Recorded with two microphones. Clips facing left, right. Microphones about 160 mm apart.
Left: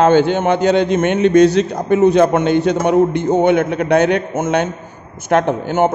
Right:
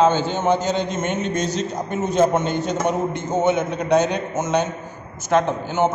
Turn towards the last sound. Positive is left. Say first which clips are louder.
# left 5 dB
turn(degrees=55)  # may be behind; listen again after turning